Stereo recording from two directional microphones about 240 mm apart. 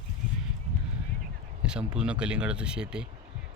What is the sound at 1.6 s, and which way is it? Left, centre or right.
Speech, centre.